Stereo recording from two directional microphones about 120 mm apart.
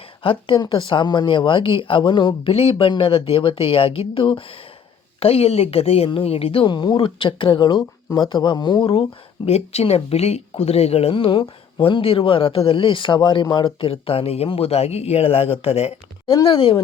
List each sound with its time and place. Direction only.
0.2 s a woman's voice: 45° left (ahead or behind)
9.5 s speech: 60° left (ahead or behind)